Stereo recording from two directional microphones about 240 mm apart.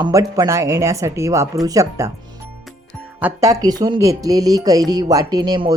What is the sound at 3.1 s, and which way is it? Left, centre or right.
Speech, centre.